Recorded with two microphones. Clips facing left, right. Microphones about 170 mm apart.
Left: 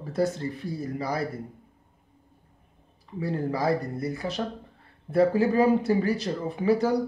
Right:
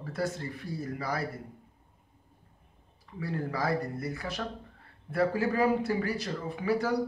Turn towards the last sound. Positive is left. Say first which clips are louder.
# left 6 dB
turn(degrees=25)  # may be behind; listen again after turning